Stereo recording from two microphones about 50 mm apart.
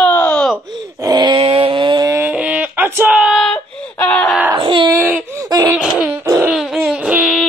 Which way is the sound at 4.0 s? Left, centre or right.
Left.